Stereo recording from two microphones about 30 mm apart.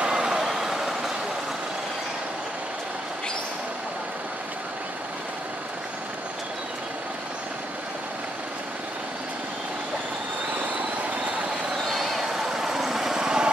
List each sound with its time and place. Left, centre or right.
0.0 s vehicle: right
0.4 s vehicle: centre
11.8 s a sound: centre
12.2 s vehicle: centre